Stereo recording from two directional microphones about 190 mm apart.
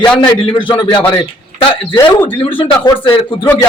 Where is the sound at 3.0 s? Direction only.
30° left (ahead or behind).